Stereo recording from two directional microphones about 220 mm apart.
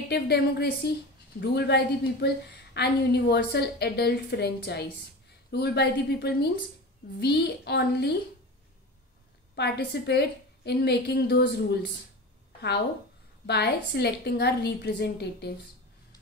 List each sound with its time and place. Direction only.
0.1 s a woman's voice: 45° left (ahead or behind)
9.6 s a woman's voice: 50° left (ahead or behind)
13.5 s a woman's voice: 50° left (ahead or behind)